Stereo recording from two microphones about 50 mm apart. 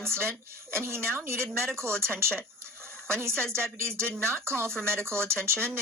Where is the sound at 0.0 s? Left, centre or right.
Right.